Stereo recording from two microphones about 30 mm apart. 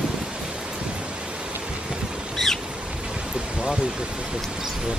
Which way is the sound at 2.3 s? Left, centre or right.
Centre.